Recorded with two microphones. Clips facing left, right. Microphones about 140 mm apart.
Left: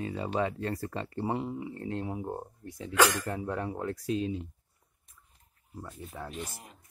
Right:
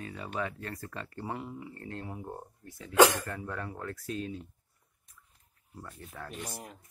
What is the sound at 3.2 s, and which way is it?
Speech, 25° left (ahead or behind).